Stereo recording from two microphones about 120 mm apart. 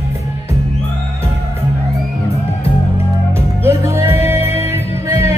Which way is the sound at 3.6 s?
20° right (ahead or behind).